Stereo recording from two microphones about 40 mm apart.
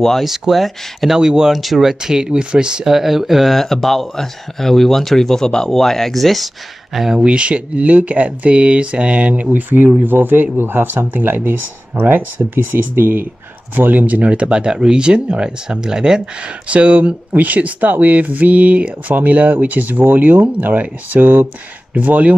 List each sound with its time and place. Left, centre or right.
0.2 s speech: centre; by 2.9 s right
2.9 s speech: centre
7.2 s speech: right
16.6 s speech: right
21.9 s speech: right